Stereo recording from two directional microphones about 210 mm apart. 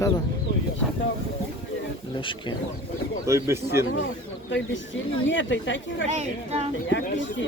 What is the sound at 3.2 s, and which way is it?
Speech, 15° right (ahead or behind).